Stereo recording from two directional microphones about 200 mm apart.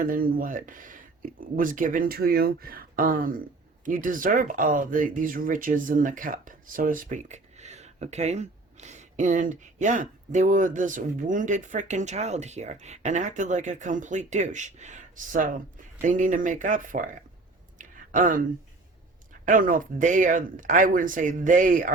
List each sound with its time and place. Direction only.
0.0 s speech: 45° right (ahead or behind)
17.7 s a sound: 40° right (ahead or behind)
19.5 s speech: 40° right (ahead or behind)